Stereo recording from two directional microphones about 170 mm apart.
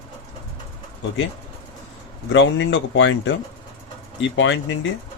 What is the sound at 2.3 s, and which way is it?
Speech, 90° left.